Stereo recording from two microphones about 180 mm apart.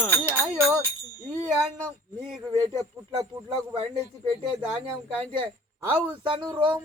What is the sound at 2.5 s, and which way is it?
Speech, 20° right (ahead or behind).